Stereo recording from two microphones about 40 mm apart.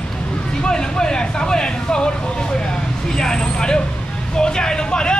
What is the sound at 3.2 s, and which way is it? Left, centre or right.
Vehicle, centre.